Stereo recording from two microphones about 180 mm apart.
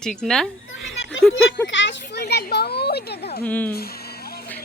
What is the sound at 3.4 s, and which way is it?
Speech, 10° left (ahead or behind).